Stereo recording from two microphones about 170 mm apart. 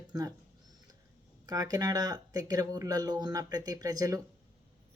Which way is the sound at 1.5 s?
20° right (ahead or behind).